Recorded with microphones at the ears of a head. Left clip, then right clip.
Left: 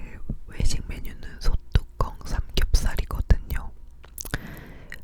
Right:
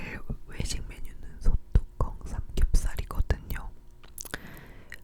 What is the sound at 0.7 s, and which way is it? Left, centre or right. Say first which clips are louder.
Whispering: left 6 dB; left.